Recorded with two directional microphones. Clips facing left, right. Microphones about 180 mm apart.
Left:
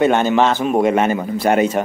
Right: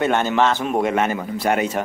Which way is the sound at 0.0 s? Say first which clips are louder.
Left 4 dB; 20° left (ahead or behind).